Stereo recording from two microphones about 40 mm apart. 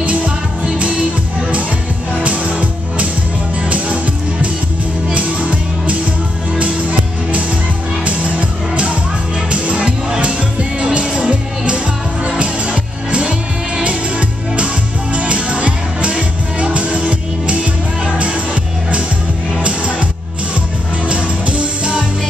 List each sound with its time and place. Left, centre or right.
0.0 s music: right
2.2 s music: right
15.1 s music: right
21.1 s music: right